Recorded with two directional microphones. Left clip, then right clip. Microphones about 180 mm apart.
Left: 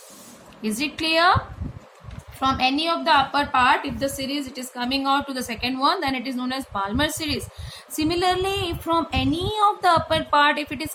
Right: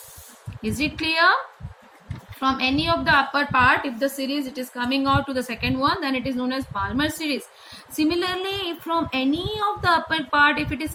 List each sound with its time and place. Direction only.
0.6 s a woman's voice: 50° left (ahead or behind)
2.4 s a woman's voice: 50° left (ahead or behind)